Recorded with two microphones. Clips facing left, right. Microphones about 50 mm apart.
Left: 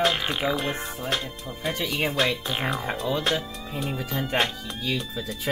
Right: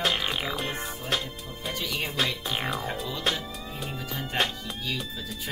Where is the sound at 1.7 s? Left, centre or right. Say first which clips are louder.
Left 4 dB; left.